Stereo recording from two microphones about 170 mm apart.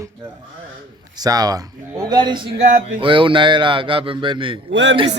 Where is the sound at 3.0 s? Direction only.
30° right (ahead or behind).